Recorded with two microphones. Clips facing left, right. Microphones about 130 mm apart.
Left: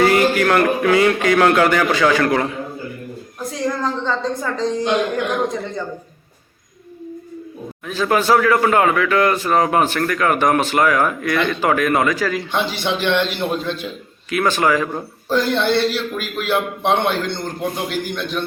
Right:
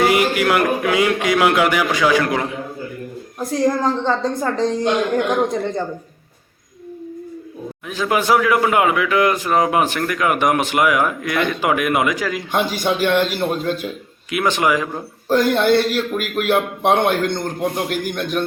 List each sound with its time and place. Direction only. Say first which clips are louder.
0.0 s speech: left 1 dB; 15° right (ahead or behind)
3.7 s a woman's voice: right 1 dB; 40° right (ahead or behind)
7.9 s speech: left 1 dB; 15° right (ahead or behind)
12.5 s a man's voice: right 2 dB; 45° right (ahead or behind)
13.8 s a man's voice: right 2 dB; 15° right (ahead or behind)
15.3 s a man's voice: right 3 dB; 50° right (ahead or behind)